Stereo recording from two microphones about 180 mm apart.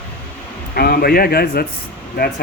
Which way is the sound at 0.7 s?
60° left (ahead or behind).